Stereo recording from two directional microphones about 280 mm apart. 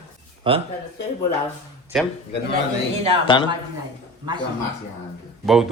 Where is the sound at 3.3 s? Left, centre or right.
Centre.